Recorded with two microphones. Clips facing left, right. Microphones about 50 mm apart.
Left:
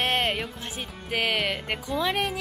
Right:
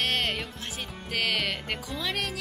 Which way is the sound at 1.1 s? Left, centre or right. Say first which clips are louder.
Left 3 dB; centre.